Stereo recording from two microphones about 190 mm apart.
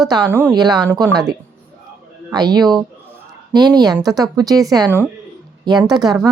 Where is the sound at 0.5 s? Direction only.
20° right (ahead or behind).